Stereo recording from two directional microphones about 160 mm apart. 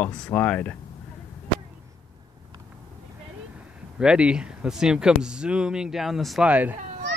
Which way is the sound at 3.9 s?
5° right (ahead or behind).